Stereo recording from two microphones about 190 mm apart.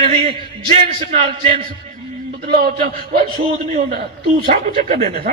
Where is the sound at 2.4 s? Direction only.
50° right (ahead or behind).